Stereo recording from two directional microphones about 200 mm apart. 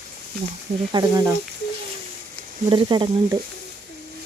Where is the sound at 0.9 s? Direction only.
20° right (ahead or behind).